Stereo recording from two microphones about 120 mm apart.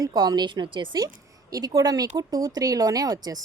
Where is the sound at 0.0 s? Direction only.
35° right (ahead or behind).